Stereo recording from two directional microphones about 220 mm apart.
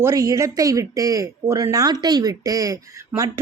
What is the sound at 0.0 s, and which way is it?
Speech, 15° right (ahead or behind).